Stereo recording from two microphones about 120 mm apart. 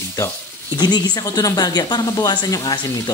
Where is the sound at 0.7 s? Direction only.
35° left (ahead or behind).